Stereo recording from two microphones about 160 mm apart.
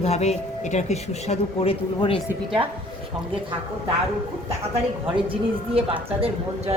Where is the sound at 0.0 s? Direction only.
45° left (ahead or behind).